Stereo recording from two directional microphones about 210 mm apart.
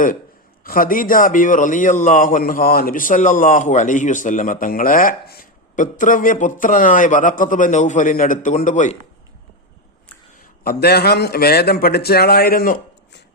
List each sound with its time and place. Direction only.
0.6 s a man's voice: 40° left (ahead or behind)
10.6 s a man's voice: 45° left (ahead or behind)